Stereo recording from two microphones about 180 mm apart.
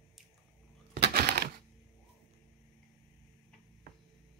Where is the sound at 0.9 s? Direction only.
65° right (ahead or behind).